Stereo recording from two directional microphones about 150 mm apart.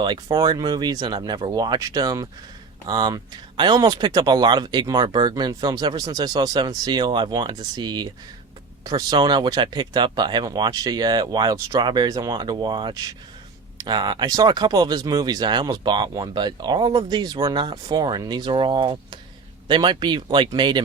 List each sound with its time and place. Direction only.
0.0 s speech: 30° right (ahead or behind)